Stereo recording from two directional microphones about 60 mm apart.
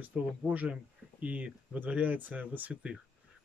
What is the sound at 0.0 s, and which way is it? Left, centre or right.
Speech, right.